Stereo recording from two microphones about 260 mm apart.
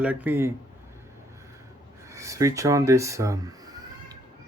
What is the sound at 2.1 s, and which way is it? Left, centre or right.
Speech, centre.